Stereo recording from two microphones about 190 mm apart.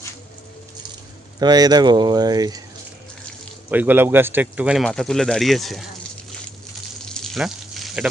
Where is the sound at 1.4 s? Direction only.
20° right (ahead or behind).